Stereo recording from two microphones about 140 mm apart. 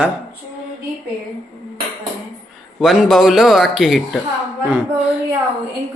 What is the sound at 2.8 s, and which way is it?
A man's voice, centre (ahead or behind).